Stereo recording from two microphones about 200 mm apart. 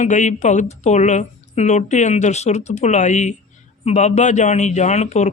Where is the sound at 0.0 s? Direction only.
35° left (ahead or behind).